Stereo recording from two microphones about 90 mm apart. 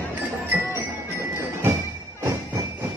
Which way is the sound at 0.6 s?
35° right (ahead or behind).